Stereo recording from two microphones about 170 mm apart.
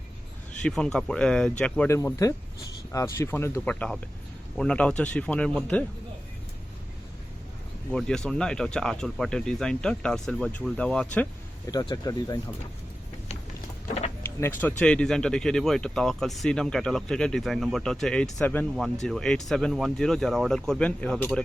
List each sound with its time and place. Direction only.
0.6 s speech: 5° left (ahead or behind)
1.9 s speech: 15° left (ahead or behind)
7.9 s speech: 5° left (ahead or behind)
11.7 s speech: 20° left (ahead or behind)
14.2 s speech: 15° left (ahead or behind)